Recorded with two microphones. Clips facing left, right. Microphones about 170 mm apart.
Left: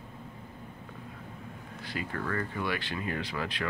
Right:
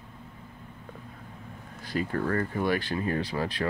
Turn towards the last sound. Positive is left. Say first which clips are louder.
# right 5 dB
turn(degrees=-35)  # may be behind; listen again after turning